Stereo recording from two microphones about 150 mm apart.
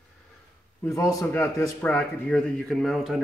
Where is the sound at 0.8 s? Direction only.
20° left (ahead or behind).